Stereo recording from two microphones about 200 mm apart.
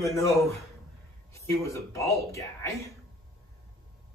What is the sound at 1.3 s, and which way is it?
Speech, 15° left (ahead or behind).